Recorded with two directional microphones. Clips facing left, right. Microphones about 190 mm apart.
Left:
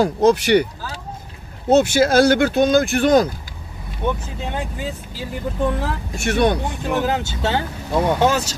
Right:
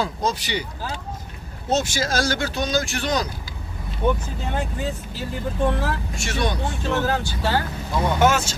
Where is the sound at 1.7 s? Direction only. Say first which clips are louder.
Left 9 dB; 60° left (ahead or behind).